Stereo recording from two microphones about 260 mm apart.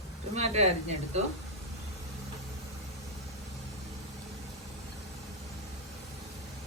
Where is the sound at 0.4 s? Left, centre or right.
Right.